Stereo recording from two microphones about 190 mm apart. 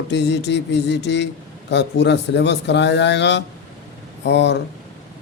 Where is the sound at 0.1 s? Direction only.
65° left (ahead or behind).